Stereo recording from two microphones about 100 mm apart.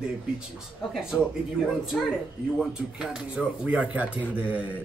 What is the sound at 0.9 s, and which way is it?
Speech, 5° right (ahead or behind).